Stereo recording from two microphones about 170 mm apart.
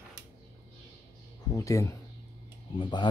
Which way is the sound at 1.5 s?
20° left (ahead or behind).